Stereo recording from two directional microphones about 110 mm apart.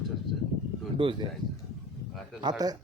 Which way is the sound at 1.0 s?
50° right (ahead or behind).